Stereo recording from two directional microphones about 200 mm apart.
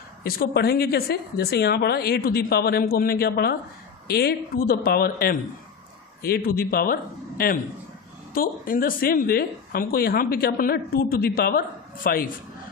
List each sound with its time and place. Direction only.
0.3 s a woman's voice: 50° left (ahead or behind)